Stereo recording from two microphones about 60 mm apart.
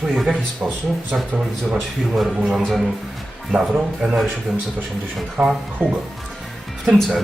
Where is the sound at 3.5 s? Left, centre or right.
Centre.